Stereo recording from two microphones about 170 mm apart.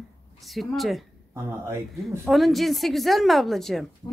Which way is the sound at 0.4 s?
Centre (ahead or behind).